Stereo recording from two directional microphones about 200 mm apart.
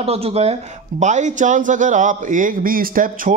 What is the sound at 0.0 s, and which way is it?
A man's voice, 30° right (ahead or behind).